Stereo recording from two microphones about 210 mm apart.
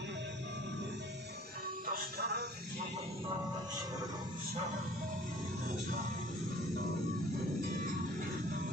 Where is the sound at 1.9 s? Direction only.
45° right (ahead or behind).